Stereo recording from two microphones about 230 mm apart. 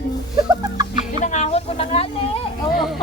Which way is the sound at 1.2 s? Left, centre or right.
Left.